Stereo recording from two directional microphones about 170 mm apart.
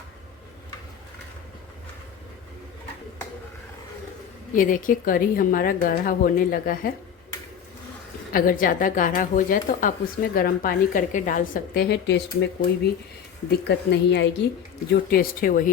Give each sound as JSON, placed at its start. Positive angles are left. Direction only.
{"t": 4.5, "sound": "a woman's voice", "side_deg": 50}
{"t": 8.3, "sound": "a woman's voice", "side_deg": 55}
{"t": 14.8, "sound": "a woman's voice", "side_deg": 60}